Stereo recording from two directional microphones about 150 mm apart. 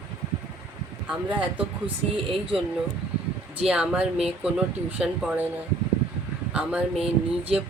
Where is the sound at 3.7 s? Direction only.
5° right (ahead or behind).